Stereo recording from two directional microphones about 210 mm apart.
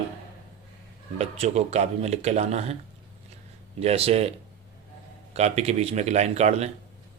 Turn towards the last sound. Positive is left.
turn(degrees=-30)  # may be behind; listen again after turning